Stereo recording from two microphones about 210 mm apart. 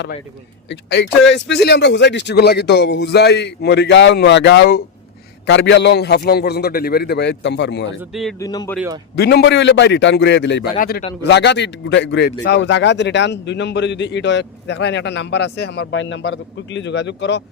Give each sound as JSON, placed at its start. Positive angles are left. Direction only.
{"t": 0.7, "sound": "a man's voice", "side_deg": 55}
{"t": 8.1, "sound": "speech", "side_deg": 0}
{"t": 8.4, "sound": "speech", "side_deg": 15}
{"t": 9.1, "sound": "a man's voice", "side_deg": 50}